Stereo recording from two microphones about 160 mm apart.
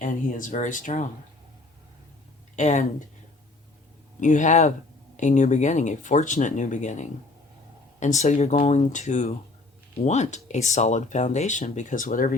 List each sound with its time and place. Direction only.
0.0 s speech: 55° left (ahead or behind)
2.6 s speech: 45° left (ahead or behind)
4.2 s speech: 50° left (ahead or behind)